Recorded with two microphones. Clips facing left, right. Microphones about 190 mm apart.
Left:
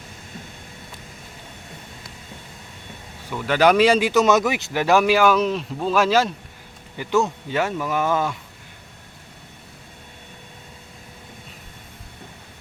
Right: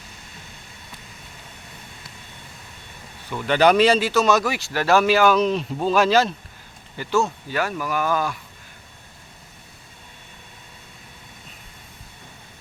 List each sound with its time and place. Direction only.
3.3 s speech: 5° left (ahead or behind); by 8.4 s 25° left (ahead or behind)